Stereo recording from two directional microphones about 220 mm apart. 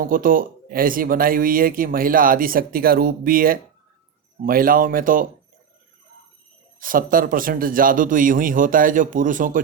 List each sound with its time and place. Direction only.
0.0 s speech: 40° right (ahead or behind)
6.7 s speech: 40° right (ahead or behind)